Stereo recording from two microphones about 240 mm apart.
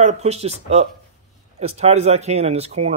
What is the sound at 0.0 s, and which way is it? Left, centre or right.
Speech, right.